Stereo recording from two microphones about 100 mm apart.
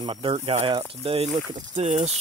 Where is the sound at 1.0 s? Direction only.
90° right.